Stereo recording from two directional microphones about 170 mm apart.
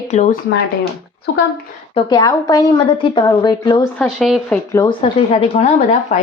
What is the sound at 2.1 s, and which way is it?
A woman's voice, 25° left (ahead or behind).